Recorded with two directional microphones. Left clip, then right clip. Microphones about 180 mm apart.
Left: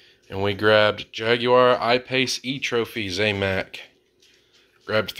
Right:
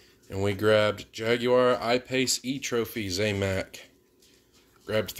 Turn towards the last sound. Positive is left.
turn(degrees=-15)  # may be behind; listen again after turning